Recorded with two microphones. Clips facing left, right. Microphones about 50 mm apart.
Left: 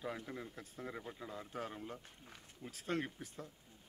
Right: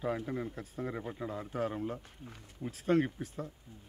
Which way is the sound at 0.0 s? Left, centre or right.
Centre.